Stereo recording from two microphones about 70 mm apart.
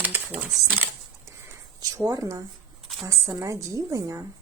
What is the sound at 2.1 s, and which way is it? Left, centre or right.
Speech, right.